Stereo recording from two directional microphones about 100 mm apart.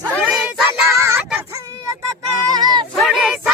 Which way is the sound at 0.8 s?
30° right (ahead or behind).